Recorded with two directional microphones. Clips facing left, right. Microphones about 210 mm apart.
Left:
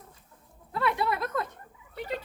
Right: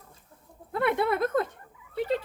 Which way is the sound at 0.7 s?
55° right (ahead or behind).